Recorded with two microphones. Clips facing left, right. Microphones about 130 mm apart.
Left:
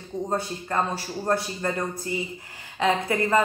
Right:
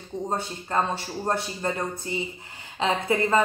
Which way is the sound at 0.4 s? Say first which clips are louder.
Even; 25° right (ahead or behind).